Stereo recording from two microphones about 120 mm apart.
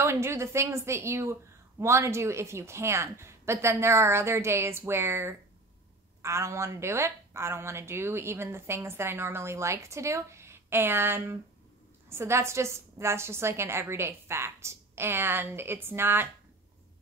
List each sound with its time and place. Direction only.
0.0 s a woman's voice: 20° right (ahead or behind)